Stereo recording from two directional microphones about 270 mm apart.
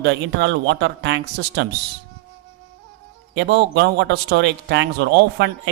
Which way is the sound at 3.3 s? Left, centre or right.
Right.